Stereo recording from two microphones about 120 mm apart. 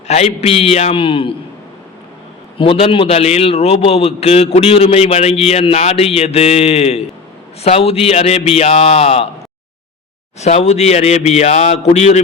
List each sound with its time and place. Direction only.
0.1 s a man's voice: 60° left (ahead or behind)
2.6 s a man's voice: 50° left (ahead or behind)
10.4 s a man's voice: 65° left (ahead or behind)